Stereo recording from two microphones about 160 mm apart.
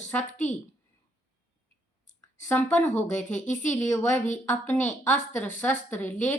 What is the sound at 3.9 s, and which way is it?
A woman's voice, 10° left (ahead or behind).